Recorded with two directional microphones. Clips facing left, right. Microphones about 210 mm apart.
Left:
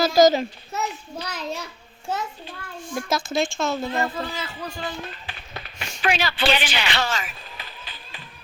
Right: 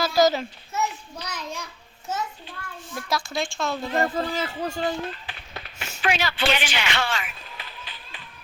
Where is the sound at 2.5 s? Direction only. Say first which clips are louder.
Left 2 dB; 40° left (ahead or behind).